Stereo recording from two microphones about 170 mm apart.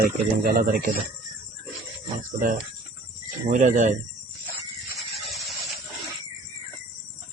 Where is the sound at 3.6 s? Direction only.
45° right (ahead or behind).